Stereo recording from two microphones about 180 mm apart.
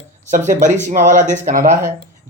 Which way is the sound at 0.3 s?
45° right (ahead or behind).